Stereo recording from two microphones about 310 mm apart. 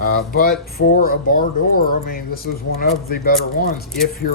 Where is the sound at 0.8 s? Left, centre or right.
Left.